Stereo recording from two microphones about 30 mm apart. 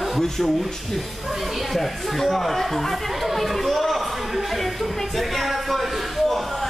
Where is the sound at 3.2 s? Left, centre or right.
Centre.